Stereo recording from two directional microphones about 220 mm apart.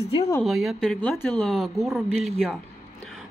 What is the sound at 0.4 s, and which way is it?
Speech, centre (ahead or behind).